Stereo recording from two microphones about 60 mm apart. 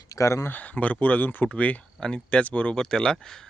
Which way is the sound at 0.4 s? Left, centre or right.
Left.